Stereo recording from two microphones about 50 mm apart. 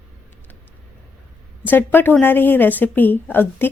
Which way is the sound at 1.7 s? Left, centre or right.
Left.